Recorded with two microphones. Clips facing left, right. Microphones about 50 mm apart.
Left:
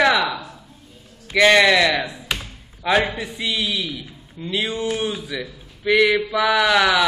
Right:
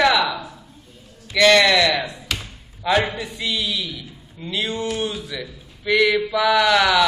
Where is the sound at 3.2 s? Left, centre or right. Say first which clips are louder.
Left 1 dB; centre.